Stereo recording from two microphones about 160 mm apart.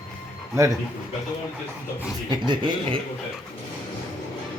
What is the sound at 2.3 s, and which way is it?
Speech, 30° right (ahead or behind).